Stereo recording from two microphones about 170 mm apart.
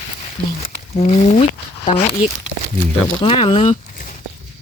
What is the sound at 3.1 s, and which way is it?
Speech, 30° left (ahead or behind).